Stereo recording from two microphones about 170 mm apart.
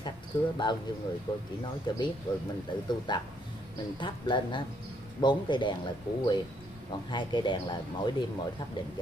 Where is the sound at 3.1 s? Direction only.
25° left (ahead or behind).